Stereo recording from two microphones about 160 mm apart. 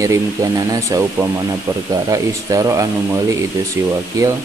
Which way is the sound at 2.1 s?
20° right (ahead or behind).